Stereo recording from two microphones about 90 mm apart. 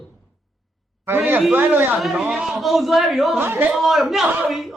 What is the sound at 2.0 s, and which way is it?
Speech, centre (ahead or behind).